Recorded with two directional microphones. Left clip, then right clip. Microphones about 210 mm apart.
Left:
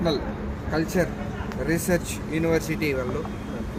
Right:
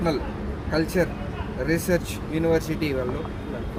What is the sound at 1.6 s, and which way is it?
Speech, 15° right (ahead or behind).